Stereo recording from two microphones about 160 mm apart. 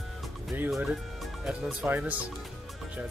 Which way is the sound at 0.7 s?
5° right (ahead or behind).